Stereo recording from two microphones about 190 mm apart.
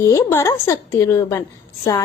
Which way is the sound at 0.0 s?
15° left (ahead or behind).